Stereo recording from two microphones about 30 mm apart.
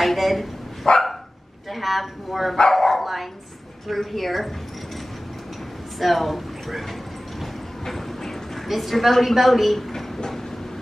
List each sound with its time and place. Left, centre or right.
0.0 s a woman's voice: centre
0.8 s dog: left
1.7 s a woman's voice: centre
5.9 s speech: centre
7.8 s a sound: centre
8.6 s a woman's voice: centre
9.9 s a sound: centre